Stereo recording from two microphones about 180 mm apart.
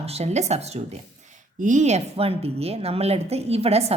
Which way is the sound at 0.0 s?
35° right (ahead or behind).